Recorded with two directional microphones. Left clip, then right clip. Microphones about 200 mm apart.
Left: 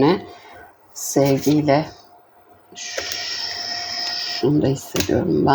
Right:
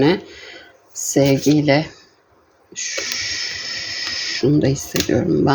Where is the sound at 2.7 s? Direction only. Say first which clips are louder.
Right 3 dB; 15° right (ahead or behind).